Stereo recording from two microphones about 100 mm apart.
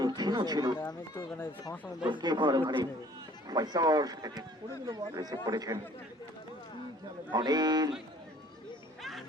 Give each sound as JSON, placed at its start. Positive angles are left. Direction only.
{"t": 0.0, "sound": "a sound", "side_deg": -45}
{"t": 2.0, "sound": "speech", "side_deg": -50}
{"t": 3.5, "sound": "speech", "side_deg": -40}
{"t": 7.3, "sound": "speech", "side_deg": -45}